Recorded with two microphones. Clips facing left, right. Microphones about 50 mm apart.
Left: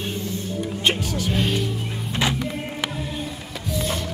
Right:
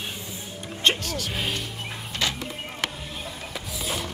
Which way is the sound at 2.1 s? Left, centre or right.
Left.